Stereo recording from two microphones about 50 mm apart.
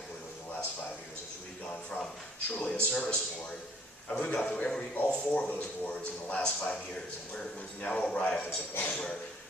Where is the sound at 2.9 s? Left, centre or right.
Left.